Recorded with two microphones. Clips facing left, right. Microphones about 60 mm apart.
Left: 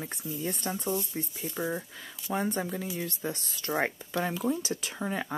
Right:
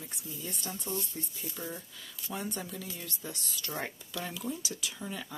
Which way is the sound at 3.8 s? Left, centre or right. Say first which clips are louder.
Left 9 dB; left.